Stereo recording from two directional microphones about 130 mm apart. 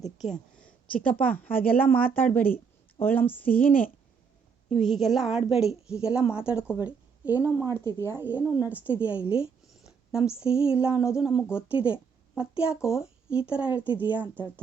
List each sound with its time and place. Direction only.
0.6 s speech: 10° left (ahead or behind)
3.7 s a woman's voice: 90° left
4.7 s a woman's voice: centre (ahead or behind)
6.7 s a sound: 15° right (ahead or behind)
7.3 s speech: 25° left (ahead or behind)
8.2 s a woman's voice: 15° right (ahead or behind)